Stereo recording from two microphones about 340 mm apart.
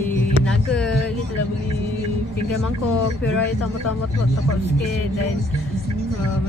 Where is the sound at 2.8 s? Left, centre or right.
Left.